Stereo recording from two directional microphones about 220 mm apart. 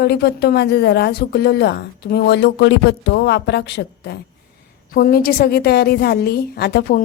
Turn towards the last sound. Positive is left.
turn(degrees=45)  # may be behind; listen again after turning